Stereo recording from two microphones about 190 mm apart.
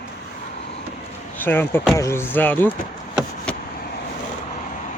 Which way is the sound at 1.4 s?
10° left (ahead or behind).